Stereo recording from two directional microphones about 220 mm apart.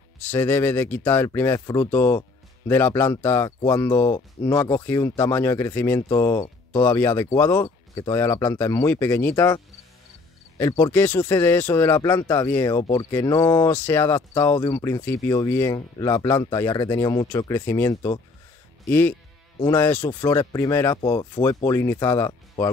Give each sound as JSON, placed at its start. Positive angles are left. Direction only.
{"t": 0.3, "sound": "speech", "side_deg": 10}
{"t": 10.6, "sound": "speech", "side_deg": 10}